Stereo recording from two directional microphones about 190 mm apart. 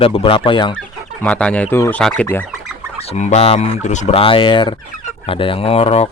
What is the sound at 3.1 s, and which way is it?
Speech, 35° left (ahead or behind).